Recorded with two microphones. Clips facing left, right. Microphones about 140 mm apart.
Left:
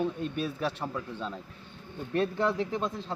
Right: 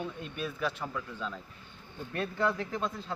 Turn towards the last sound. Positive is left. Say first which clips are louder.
# left 3 dB
turn(degrees=20)  # may be behind; listen again after turning